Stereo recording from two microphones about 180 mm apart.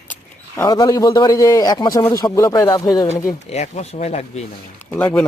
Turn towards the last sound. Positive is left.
turn(degrees=10)  # may be behind; listen again after turning